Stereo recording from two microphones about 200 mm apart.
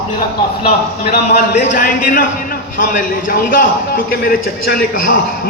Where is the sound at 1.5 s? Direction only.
40° left (ahead or behind).